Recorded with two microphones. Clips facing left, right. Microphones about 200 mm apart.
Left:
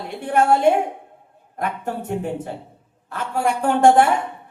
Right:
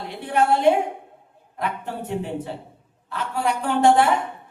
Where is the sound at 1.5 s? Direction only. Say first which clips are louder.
Left 3 dB; 50° left (ahead or behind).